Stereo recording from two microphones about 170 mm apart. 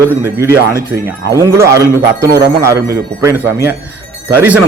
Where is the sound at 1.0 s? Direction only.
15° right (ahead or behind).